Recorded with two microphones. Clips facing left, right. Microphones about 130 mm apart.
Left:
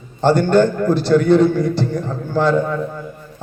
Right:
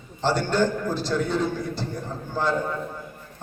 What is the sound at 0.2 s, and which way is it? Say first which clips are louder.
A man's voice: left 9 dB; 55° left (ahead or behind).